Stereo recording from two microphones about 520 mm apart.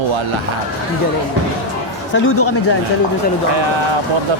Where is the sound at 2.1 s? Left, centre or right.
Left.